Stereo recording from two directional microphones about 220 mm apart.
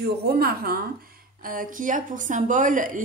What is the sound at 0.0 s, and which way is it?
A woman's voice, 45° right (ahead or behind).